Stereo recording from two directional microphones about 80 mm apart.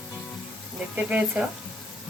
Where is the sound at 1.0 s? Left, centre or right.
Centre.